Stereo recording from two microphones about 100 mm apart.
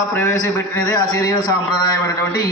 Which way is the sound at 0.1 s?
30° left (ahead or behind).